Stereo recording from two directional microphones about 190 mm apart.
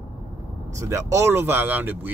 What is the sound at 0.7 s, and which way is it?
Speech, 15° right (ahead or behind).